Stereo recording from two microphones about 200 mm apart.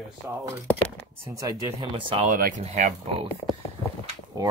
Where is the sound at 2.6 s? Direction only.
35° right (ahead or behind).